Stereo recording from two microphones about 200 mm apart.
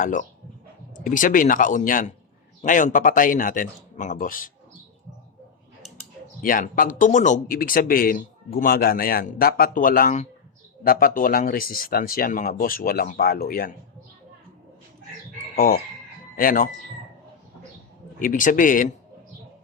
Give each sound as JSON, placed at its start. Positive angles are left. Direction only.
{"t": 0.0, "sound": "speech", "side_deg": 40}
{"t": 6.4, "sound": "speech", "side_deg": 45}
{"t": 15.5, "sound": "speech", "side_deg": 45}
{"t": 18.2, "sound": "speech", "side_deg": 40}